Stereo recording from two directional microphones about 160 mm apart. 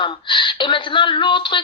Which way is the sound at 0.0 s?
30° left (ahead or behind).